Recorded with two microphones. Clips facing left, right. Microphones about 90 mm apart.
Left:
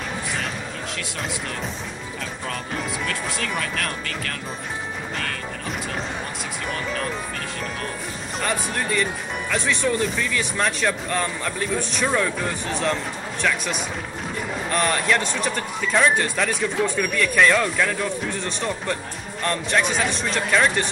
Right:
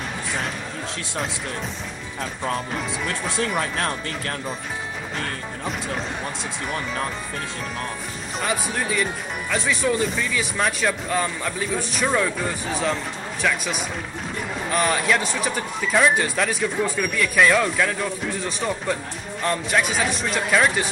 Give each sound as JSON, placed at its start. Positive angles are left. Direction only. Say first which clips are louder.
{"t": 3.1, "sound": "speech", "louder": "right 2 dB", "side_deg": -30}
{"t": 8.4, "sound": "speech", "louder": "even", "side_deg": -5}